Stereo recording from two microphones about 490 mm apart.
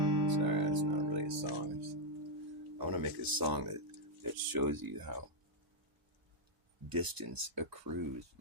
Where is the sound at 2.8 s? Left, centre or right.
Right.